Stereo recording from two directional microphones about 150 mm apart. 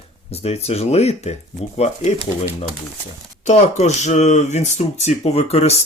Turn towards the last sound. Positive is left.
turn(degrees=45)  # may be behind; listen again after turning